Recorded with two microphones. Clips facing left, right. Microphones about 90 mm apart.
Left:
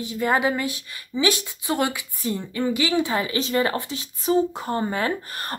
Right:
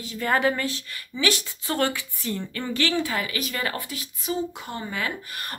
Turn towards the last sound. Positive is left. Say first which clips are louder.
# left 5 dB
turn(degrees=35)  # may be behind; listen again after turning